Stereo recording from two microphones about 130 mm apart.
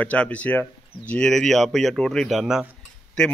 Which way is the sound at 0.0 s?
10° left (ahead or behind).